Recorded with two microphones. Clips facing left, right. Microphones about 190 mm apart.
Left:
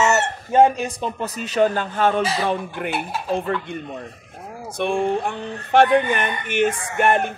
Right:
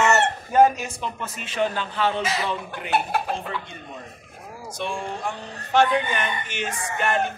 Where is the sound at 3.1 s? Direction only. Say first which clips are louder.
Left 1 dB; 60° right (ahead or behind).